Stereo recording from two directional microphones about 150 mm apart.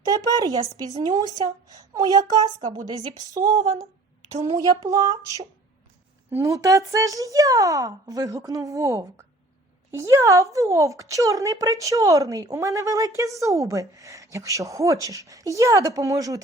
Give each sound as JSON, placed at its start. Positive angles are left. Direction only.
{"t": 0.0, "sound": "a woman's voice", "side_deg": -25}
{"t": 4.3, "sound": "a woman's voice", "side_deg": -45}
{"t": 4.5, "sound": "a woman's voice", "side_deg": -25}
{"t": 6.3, "sound": "a woman's voice", "side_deg": -20}